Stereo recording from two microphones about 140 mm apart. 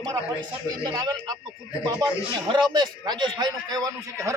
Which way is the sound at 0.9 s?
30° right (ahead or behind).